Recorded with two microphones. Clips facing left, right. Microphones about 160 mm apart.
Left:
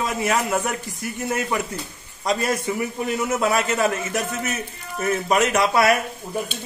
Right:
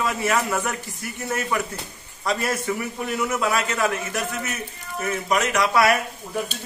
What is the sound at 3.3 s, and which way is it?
Speech, 30° left (ahead or behind).